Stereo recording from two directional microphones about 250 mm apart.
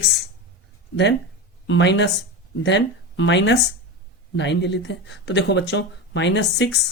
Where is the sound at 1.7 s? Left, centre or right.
Left.